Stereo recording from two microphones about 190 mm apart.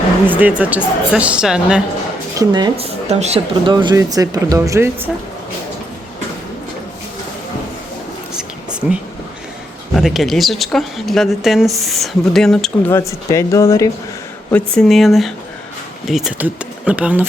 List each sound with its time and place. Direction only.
0.3 s speech: 10° right (ahead or behind)
2.4 s speech: 20° right (ahead or behind)
3.7 s speech: 25° right (ahead or behind)
8.4 s a sound: 5° right (ahead or behind)
9.9 s speech: centre (ahead or behind)
12.9 s speech: 15° left (ahead or behind)
14.5 s speech: centre (ahead or behind)